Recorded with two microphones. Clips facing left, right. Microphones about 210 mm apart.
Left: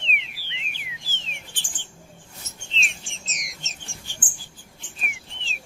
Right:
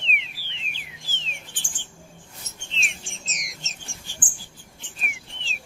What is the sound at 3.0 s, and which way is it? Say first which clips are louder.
Bird: right 1 dB; centre (ahead or behind).